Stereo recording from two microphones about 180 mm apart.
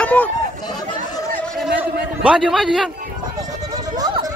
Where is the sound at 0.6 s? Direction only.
20° left (ahead or behind).